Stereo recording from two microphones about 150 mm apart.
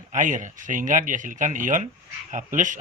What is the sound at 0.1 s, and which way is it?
Speech, 60° right (ahead or behind).